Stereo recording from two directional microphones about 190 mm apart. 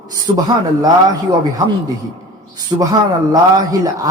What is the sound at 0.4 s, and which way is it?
Speech, 20° right (ahead or behind).